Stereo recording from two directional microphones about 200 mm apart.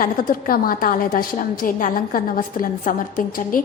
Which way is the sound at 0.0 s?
45° left (ahead or behind).